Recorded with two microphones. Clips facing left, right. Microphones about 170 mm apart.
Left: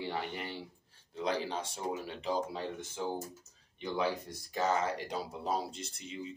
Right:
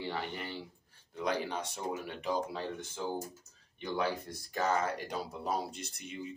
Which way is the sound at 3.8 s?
20° left (ahead or behind).